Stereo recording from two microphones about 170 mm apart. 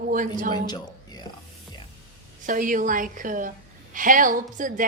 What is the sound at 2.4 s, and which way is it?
A woman's voice, 50° right (ahead or behind).